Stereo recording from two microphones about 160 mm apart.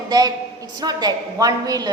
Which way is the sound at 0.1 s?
25° right (ahead or behind).